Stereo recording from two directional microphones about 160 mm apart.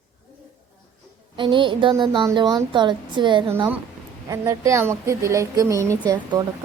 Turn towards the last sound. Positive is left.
turn(degrees=-25)  # may be behind; listen again after turning